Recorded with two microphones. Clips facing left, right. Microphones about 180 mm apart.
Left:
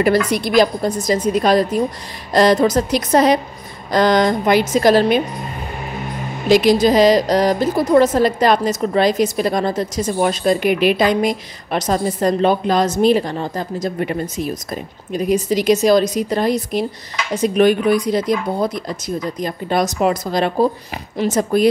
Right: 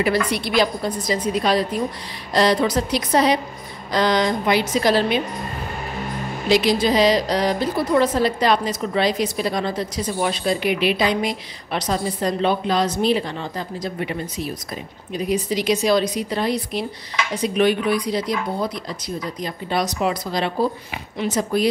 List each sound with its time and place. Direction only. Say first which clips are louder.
0.3 s a woman's voice: left 5 dB; 45° left (ahead or behind)
6.5 s a woman's voice: left 5 dB; 45° left (ahead or behind)